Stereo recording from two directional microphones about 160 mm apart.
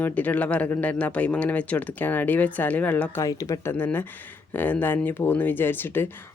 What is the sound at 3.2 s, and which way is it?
Speech, 20° left (ahead or behind).